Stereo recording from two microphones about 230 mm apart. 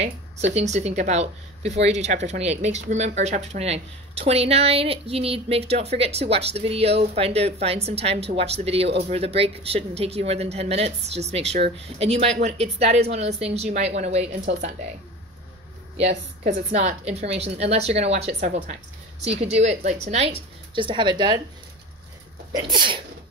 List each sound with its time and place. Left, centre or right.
0.6 s a woman's voice: right
16.4 s a woman's voice: right
22.5 s a woman's voice: centre